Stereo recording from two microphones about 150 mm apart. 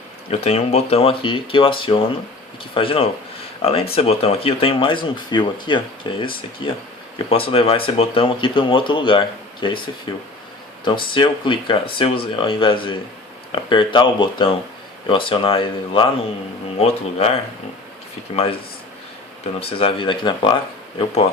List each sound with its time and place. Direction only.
0.3 s speech: 45° left (ahead or behind)
11.1 s speech: 35° left (ahead or behind)
19.5 s speech: 35° left (ahead or behind)